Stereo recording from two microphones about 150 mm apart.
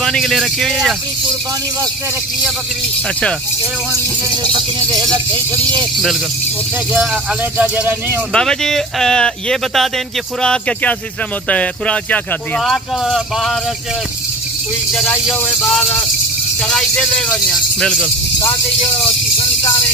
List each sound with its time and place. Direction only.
0.0 s speech: 5° left (ahead or behind)
4.9 s speech: 25° right (ahead or behind)
7.5 s speech: 10° right (ahead or behind)
8.3 s speech: 5° left (ahead or behind)
14.9 s speech: centre (ahead or behind)